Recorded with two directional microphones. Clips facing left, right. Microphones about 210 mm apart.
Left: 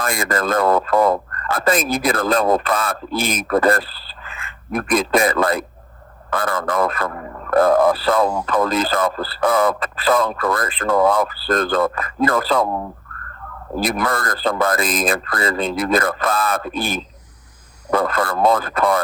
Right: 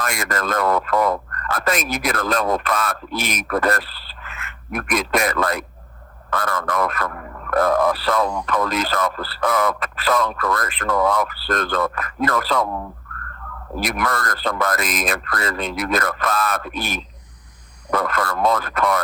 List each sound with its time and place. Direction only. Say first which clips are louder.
0.0 s a man's voice: left 4 dB; 30° left (ahead or behind)